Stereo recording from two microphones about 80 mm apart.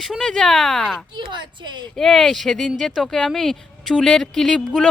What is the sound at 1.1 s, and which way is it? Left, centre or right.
Music, right.